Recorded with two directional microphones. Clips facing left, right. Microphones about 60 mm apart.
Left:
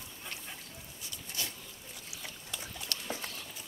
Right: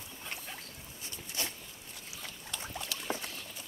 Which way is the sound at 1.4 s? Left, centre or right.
Right.